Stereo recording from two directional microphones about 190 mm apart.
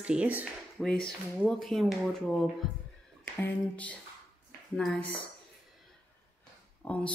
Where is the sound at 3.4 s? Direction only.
5° left (ahead or behind).